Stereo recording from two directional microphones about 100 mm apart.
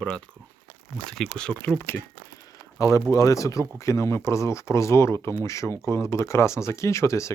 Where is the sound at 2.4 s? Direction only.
35° left (ahead or behind).